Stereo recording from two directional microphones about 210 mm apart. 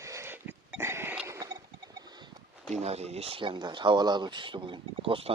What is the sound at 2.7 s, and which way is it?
Speech, 30° right (ahead or behind).